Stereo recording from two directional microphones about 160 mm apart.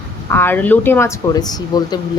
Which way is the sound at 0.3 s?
15° left (ahead or behind).